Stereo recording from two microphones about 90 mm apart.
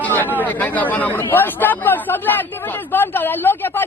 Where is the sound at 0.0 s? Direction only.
20° left (ahead or behind).